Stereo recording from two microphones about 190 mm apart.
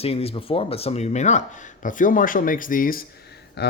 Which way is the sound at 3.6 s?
60° left (ahead or behind).